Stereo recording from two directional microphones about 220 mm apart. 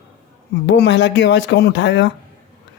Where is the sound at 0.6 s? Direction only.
50° left (ahead or behind).